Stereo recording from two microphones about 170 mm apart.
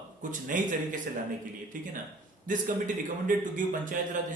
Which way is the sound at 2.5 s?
50° right (ahead or behind).